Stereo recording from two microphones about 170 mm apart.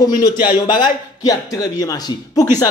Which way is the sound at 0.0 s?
25° left (ahead or behind).